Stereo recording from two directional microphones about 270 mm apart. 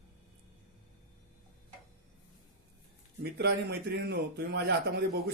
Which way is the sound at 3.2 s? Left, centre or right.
Right.